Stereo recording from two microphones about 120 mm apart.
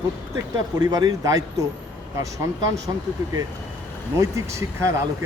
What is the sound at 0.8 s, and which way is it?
Speech, 35° right (ahead or behind).